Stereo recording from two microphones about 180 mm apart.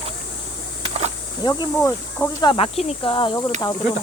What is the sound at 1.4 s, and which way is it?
Speech, 25° left (ahead or behind).